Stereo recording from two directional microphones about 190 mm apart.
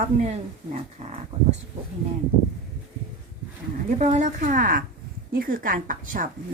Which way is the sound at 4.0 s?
40° right (ahead or behind).